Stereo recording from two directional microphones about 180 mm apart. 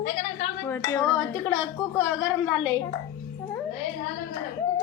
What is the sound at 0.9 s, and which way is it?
Speech, 10° left (ahead or behind).